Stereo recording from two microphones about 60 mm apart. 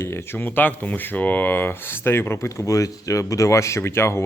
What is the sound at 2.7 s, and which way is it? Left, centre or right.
A man's voice, left.